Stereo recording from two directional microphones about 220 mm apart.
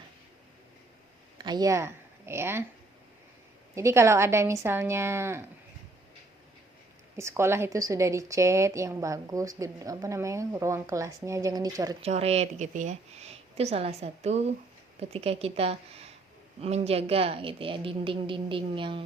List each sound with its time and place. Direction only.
1.4 s speech: 20° right (ahead or behind)
3.8 s speech: 15° right (ahead or behind)
7.2 s speech: 10° right (ahead or behind)
12.0 s a woman's voice: 30° right (ahead or behind)